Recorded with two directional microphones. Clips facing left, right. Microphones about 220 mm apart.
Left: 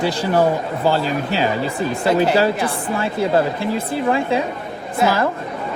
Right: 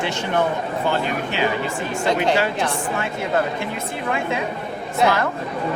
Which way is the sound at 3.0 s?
30° left (ahead or behind).